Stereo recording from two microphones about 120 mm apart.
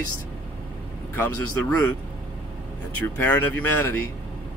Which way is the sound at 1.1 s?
20° left (ahead or behind).